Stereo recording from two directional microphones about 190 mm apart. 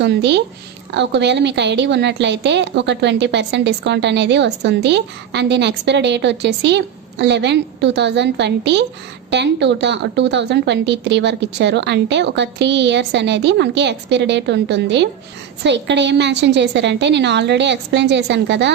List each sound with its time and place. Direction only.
0.0 s a woman's voice: 65° right (ahead or behind)